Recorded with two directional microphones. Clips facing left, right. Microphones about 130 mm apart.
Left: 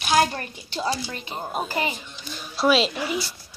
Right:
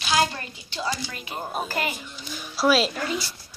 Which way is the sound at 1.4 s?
Centre (ahead or behind).